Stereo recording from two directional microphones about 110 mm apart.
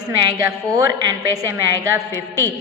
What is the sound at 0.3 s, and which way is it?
A woman's voice, 25° right (ahead or behind).